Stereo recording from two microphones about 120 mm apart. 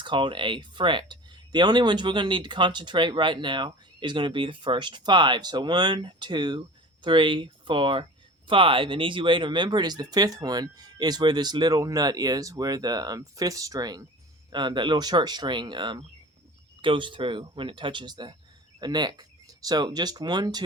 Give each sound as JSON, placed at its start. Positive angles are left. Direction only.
{"t": 0.0, "sound": "speech", "side_deg": -40}